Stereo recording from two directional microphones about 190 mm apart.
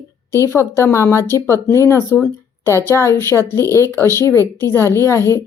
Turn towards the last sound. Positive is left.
turn(degrees=15)  # may be behind; listen again after turning